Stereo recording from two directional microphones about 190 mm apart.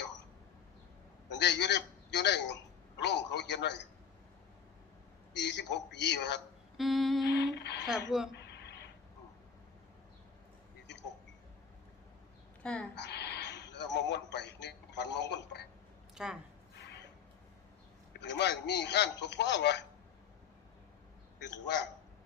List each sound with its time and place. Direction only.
1.3 s a man's voice: 65° left (ahead or behind)
5.3 s a man's voice: 65° left (ahead or behind)
6.7 s music: centre (ahead or behind)
7.3 s a sound: 65° left (ahead or behind)
12.6 s music: 5° left (ahead or behind)
13.0 s a sound: 60° left (ahead or behind)
16.1 s speech: 5° right (ahead or behind)
18.1 s a man's voice: 65° left (ahead or behind)
21.4 s a man's voice: 65° left (ahead or behind)